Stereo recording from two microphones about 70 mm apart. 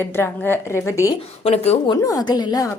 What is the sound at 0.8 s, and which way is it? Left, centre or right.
Speech, left.